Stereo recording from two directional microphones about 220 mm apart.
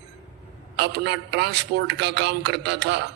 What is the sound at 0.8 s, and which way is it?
A man's voice, 50° right (ahead or behind).